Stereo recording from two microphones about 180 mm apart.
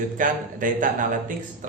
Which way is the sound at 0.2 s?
50° right (ahead or behind).